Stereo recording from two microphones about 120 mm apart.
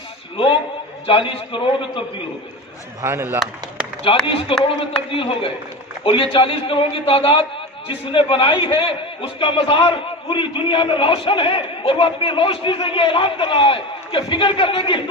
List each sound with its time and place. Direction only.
1.0 s a man's voice: 50° left (ahead or behind)
3.0 s speech: 20° right (ahead or behind)
4.0 s a man's voice: 50° left (ahead or behind)